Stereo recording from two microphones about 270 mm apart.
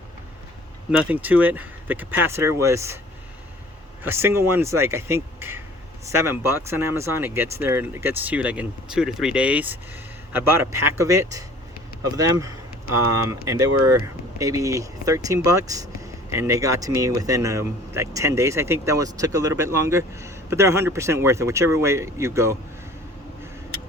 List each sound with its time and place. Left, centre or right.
0.9 s speech: centre
4.0 s speech: centre
13.8 s speech: centre